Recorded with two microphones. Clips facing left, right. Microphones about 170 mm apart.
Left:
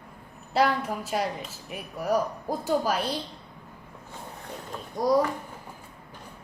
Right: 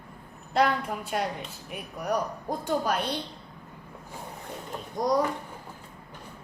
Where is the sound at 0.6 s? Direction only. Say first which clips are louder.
Left 1 dB; centre (ahead or behind).